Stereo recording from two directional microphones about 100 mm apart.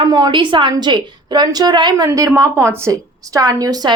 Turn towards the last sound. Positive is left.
turn(degrees=-40)  # may be behind; listen again after turning